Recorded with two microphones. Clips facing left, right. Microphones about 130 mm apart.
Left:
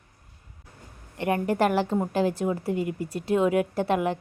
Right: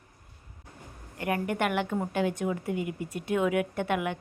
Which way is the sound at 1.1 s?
25° left (ahead or behind).